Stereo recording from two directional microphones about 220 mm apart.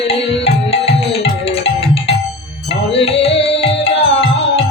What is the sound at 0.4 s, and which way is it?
Music, 25° left (ahead or behind).